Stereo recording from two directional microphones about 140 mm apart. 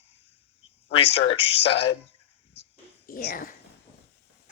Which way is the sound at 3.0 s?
85° left.